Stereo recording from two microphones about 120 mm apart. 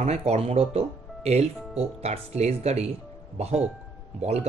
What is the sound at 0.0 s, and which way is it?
Speech, 65° right (ahead or behind).